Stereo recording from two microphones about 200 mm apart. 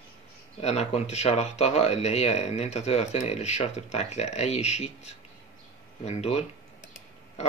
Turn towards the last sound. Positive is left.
turn(degrees=30)  # may be behind; listen again after turning